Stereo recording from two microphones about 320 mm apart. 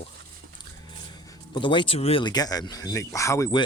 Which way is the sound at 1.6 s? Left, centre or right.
Centre.